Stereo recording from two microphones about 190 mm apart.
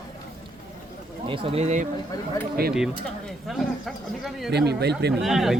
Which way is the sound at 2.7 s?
Centre (ahead or behind).